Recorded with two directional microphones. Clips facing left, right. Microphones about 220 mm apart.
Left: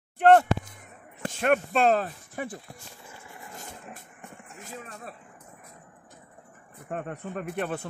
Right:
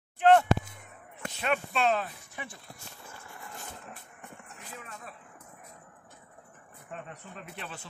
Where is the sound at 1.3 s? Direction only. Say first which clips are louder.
Left 7 dB; 50° left (ahead or behind).